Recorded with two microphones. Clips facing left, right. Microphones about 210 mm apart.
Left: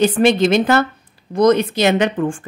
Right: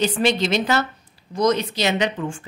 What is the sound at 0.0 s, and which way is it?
A woman's voice, 55° left (ahead or behind).